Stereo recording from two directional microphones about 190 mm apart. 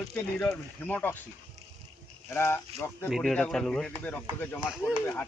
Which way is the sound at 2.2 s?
15° left (ahead or behind).